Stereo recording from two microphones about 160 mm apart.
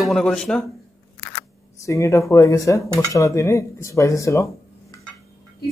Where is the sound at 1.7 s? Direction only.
20° left (ahead or behind).